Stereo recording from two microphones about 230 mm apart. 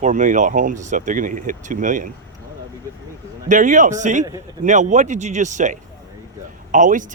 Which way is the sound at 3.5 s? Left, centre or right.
Right.